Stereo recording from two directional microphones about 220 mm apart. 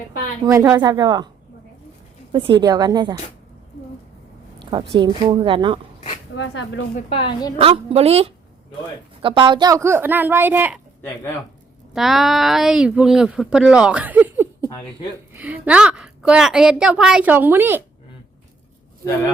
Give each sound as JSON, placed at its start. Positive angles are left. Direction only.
{"t": 0.4, "sound": "a woman's voice", "side_deg": -15}
{"t": 2.3, "sound": "a woman's voice", "side_deg": -20}
{"t": 4.9, "sound": "a woman's voice", "side_deg": -20}
{"t": 6.3, "sound": "speech", "side_deg": 55}
{"t": 6.9, "sound": "a woman's voice", "side_deg": 25}
{"t": 7.6, "sound": "a woman's voice", "side_deg": -25}
{"t": 11.0, "sound": "speech", "side_deg": 10}
{"t": 11.9, "sound": "speech", "side_deg": 0}